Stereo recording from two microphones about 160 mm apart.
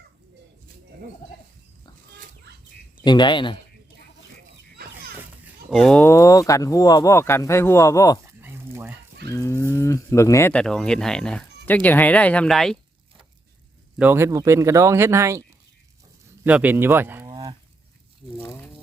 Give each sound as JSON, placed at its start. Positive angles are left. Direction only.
{"t": 3.0, "sound": "speech", "side_deg": 25}
{"t": 5.7, "sound": "speech", "side_deg": 5}
{"t": 6.0, "sound": "speech", "side_deg": 20}
{"t": 8.3, "sound": "a sound", "side_deg": -15}
{"t": 9.3, "sound": "livestock", "side_deg": 20}
{"t": 10.5, "sound": "speech", "side_deg": 5}
{"t": 14.0, "sound": "speech", "side_deg": -15}
{"t": 17.2, "sound": "a sound", "side_deg": -25}